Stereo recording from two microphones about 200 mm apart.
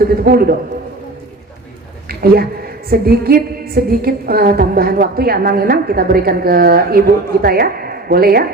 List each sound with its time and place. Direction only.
0.0 s music: 50° right (ahead or behind)
2.0 s a woman's voice: 50° right (ahead or behind)
2.9 s music: 50° right (ahead or behind)
7.4 s a woman's voice: 50° right (ahead or behind)